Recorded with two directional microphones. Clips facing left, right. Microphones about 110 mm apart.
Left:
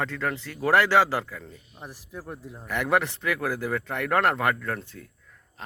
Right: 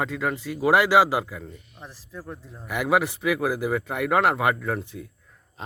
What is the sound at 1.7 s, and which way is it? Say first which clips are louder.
Speech: left 3 dB; 15° left (ahead or behind).